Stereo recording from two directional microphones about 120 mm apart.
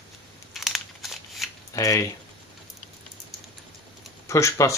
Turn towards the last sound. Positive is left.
turn(degrees=25)  # may be behind; listen again after turning